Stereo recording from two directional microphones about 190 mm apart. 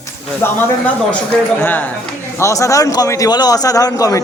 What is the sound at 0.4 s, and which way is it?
Speech, 15° left (ahead or behind).